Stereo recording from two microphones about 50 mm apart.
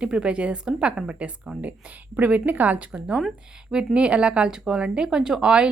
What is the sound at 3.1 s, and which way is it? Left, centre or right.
Speech, centre.